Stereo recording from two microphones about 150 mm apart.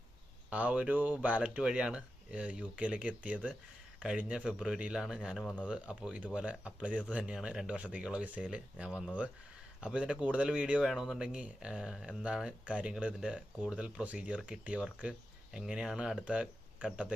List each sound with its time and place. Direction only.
0.5 s speech: 10° right (ahead or behind)